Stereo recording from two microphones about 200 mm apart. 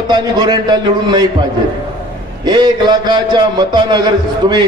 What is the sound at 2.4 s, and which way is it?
A man's voice, 20° right (ahead or behind).